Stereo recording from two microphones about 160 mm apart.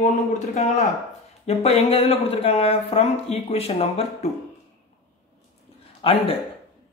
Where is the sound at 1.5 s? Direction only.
40° left (ahead or behind).